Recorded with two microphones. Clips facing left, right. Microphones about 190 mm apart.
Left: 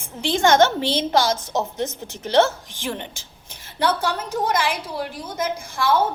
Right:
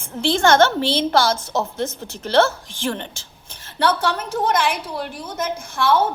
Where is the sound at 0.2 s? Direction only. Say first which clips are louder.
Right 1 dB; 15° left (ahead or behind).